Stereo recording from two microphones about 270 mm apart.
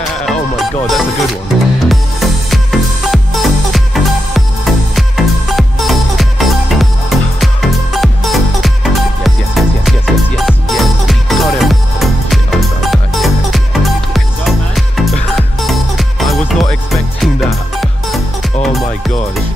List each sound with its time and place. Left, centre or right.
0.2 s music: centre